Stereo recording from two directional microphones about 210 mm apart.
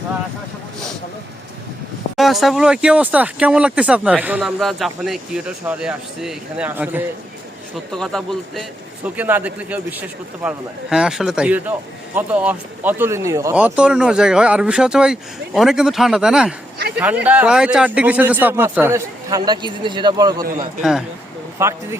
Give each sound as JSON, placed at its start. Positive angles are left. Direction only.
{"t": 2.1, "sound": "speech", "side_deg": 0}
{"t": 7.9, "sound": "a man's voice", "side_deg": 0}
{"t": 16.7, "sound": "a man's voice", "side_deg": -50}
{"t": 17.2, "sound": "a man's voice", "side_deg": -5}
{"t": 21.6, "sound": "a man's voice", "side_deg": -15}